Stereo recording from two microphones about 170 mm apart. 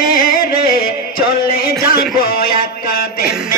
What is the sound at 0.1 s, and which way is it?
Music, 60° left (ahead or behind).